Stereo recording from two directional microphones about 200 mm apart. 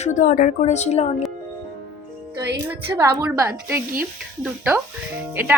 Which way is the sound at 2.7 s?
20° right (ahead or behind).